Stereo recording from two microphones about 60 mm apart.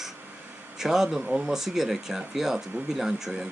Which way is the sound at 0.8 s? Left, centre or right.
Centre.